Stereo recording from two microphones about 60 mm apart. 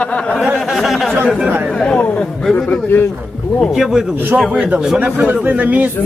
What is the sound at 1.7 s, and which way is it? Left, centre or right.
Speech, centre.